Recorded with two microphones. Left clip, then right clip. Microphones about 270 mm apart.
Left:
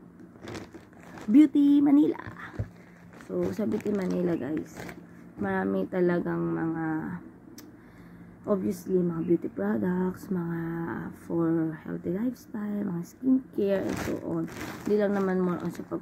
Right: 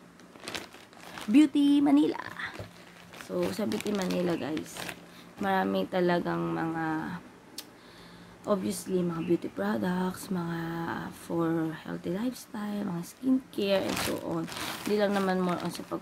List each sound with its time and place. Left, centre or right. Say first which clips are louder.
1.3 s speech: left 3 dB; centre